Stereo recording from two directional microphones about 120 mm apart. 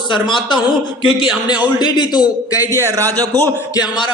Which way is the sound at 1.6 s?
40° left (ahead or behind).